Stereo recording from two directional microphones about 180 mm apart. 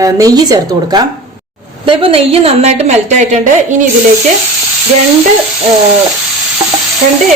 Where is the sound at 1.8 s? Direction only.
30° right (ahead or behind).